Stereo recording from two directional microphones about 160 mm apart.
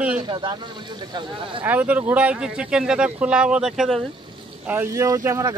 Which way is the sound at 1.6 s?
10° right (ahead or behind).